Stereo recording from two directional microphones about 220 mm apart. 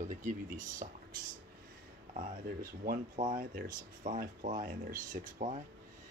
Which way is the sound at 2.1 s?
40° right (ahead or behind).